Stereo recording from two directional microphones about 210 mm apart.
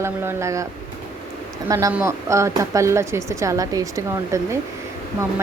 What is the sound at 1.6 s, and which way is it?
Speech, 15° right (ahead or behind).